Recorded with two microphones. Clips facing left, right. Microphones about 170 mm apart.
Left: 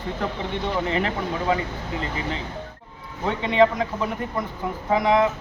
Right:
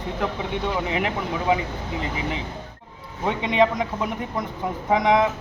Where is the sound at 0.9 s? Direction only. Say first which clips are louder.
Left 1 dB; 10° right (ahead or behind).